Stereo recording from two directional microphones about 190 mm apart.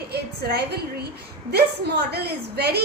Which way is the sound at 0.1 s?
60° right (ahead or behind).